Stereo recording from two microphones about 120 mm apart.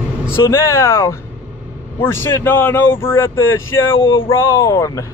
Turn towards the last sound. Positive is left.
turn(degrees=25)  # may be behind; listen again after turning